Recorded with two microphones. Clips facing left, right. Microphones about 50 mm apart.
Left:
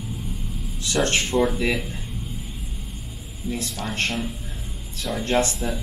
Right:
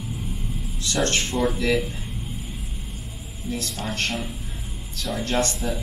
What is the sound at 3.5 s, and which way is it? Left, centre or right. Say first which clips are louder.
Speech: left 1 dB; centre.